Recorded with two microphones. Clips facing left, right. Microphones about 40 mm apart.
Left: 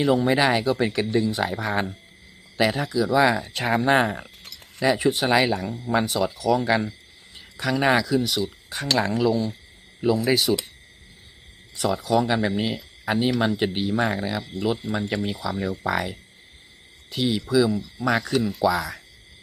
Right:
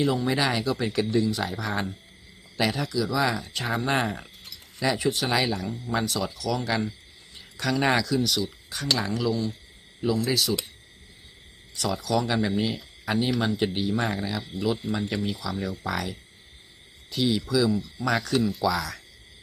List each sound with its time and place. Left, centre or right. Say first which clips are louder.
0.0 s speech: left 5 dB; left
4.0 s speech: left 4 dB; centre
10.2 s speech: left 5 dB; left
11.7 s speech: left 4 dB; left